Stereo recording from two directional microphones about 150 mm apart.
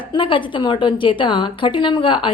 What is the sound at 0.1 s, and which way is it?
A woman's voice, 35° left (ahead or behind).